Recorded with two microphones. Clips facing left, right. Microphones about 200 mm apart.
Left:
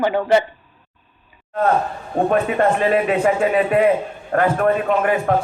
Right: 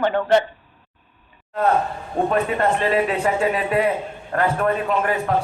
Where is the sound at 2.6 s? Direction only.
50° left (ahead or behind).